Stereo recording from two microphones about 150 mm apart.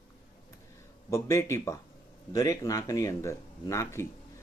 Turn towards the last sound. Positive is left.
turn(degrees=20)  # may be behind; listen again after turning